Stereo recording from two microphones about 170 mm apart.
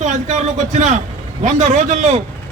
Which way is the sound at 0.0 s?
45° right (ahead or behind).